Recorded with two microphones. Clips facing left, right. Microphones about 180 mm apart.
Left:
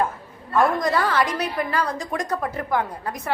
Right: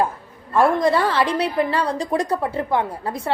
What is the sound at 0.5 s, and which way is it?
A woman's voice, 30° right (ahead or behind).